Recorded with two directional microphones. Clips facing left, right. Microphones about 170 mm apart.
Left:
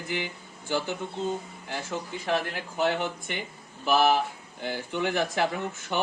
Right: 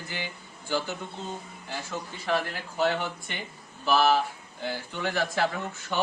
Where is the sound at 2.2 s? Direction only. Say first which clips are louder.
Even; 15° left (ahead or behind).